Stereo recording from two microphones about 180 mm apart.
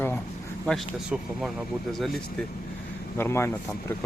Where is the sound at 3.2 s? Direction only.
15° left (ahead or behind).